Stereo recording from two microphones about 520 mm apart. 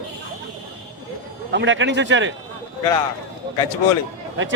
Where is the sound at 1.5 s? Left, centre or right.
Right.